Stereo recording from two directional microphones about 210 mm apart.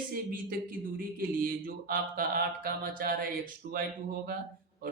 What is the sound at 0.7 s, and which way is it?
Speech, 45° right (ahead or behind).